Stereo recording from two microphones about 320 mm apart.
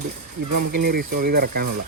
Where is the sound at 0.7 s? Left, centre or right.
Right.